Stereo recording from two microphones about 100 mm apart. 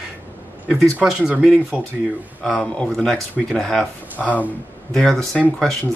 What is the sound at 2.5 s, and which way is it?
Speech, 10° left (ahead or behind).